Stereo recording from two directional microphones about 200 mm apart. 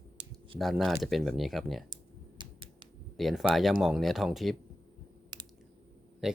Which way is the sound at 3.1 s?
Centre (ahead or behind).